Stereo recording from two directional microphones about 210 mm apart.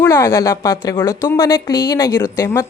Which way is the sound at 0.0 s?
10° left (ahead or behind).